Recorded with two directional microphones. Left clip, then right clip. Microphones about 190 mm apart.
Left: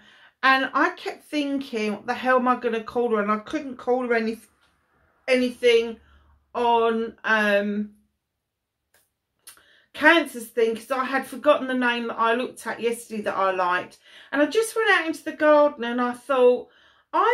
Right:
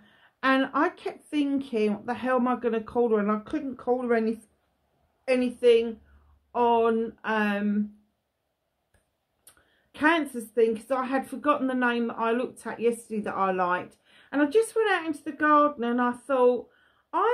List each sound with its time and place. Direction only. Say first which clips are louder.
0.4 s speech: left 4 dB; 50° right (ahead or behind)
9.9 s speech: left 6 dB; 50° right (ahead or behind)